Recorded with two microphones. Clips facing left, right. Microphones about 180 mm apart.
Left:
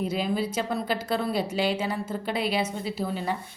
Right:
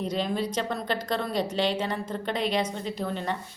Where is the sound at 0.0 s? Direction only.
5° left (ahead or behind).